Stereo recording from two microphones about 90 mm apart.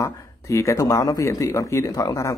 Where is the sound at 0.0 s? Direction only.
35° left (ahead or behind).